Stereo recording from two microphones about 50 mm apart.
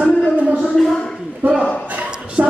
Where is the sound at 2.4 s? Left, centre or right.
Right.